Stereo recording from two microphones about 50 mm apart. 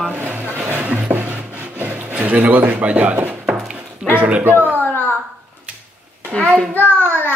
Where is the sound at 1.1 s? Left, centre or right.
Right.